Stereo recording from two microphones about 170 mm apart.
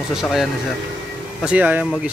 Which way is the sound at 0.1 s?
Centre (ahead or behind).